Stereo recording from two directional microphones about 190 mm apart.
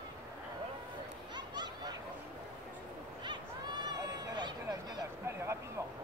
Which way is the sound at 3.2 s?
20° right (ahead or behind).